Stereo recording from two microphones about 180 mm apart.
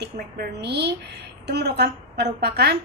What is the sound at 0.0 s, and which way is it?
A woman's voice, 70° right (ahead or behind).